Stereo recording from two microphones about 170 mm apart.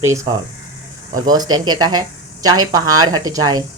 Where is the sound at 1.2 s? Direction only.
25° right (ahead or behind).